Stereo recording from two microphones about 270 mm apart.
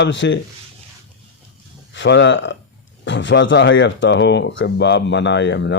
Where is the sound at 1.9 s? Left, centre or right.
Left.